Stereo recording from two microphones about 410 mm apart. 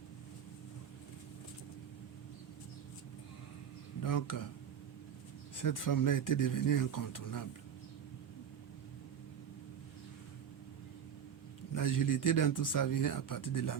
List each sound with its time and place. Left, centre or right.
4.0 s speech: left
5.5 s speech: left
11.7 s speech: left